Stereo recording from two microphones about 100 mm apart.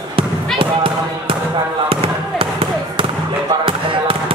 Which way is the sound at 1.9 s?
65° right (ahead or behind).